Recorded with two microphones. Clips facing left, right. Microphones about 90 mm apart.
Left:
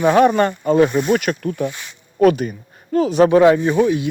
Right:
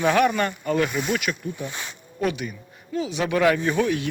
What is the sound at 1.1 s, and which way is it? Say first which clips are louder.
Speech: left 8 dB; 45° left (ahead or behind).